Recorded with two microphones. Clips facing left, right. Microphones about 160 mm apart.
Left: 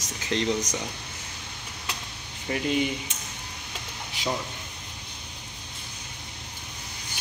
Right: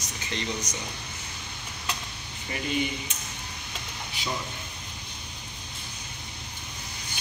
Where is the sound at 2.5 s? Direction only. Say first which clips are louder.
Left 4 dB; 90° left.